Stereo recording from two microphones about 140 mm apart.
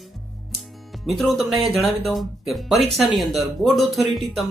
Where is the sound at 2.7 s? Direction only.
50° right (ahead or behind).